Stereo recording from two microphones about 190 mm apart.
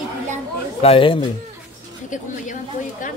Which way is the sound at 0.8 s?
30° left (ahead or behind).